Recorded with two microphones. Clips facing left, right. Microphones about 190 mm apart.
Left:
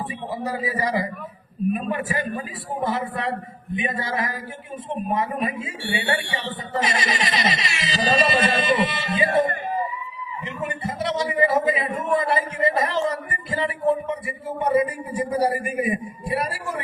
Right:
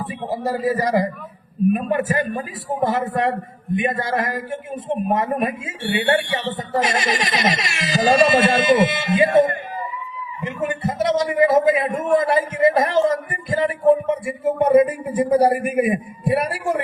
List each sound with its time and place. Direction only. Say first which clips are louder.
0.3 s a man's voice: right 7 dB; 40° right (ahead or behind)
10.4 s a man's voice: right 6 dB; 45° right (ahead or behind)